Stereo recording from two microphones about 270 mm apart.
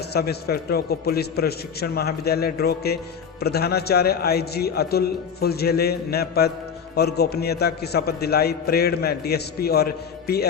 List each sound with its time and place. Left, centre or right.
0.1 s a man's voice: left